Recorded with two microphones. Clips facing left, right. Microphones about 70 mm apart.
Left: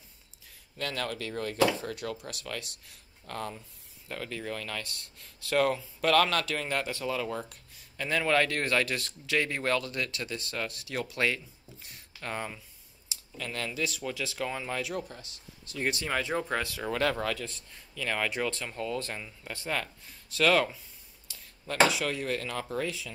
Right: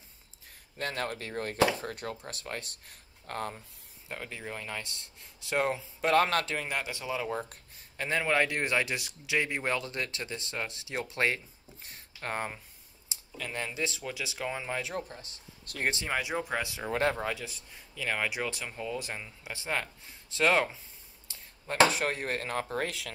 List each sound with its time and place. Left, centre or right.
0.7 s speech: right
4.1 s speech: centre
6.5 s speech: centre
7.3 s a sound: right
8.2 s speech: centre; by 12.6 s right
13.1 s a sound: right
13.5 s speech: right
14.8 s speech: right
15.6 s speech: right
16.1 s speech: centre
16.9 s speech: right
17.4 s speech: centre; by 22.8 s right
22.8 s speech: right